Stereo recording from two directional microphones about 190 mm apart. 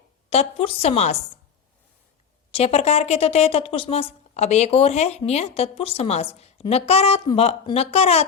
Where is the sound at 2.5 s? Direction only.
35° left (ahead or behind).